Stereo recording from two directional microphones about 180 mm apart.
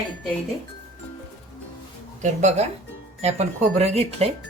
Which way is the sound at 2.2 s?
40° right (ahead or behind).